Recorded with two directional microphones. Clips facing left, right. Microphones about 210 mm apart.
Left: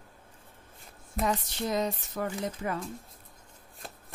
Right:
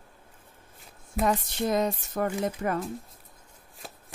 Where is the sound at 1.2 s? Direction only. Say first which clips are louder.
Right 4 dB; 55° right (ahead or behind).